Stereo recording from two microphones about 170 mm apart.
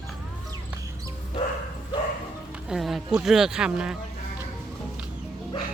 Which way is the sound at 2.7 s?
Centre (ahead or behind).